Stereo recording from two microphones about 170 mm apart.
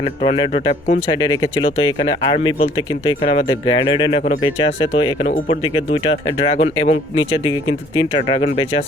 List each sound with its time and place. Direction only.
0.0 s speech: 30° left (ahead or behind)